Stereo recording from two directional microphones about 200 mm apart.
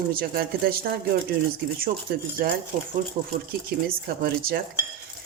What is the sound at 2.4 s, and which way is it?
Speech, 50° right (ahead or behind).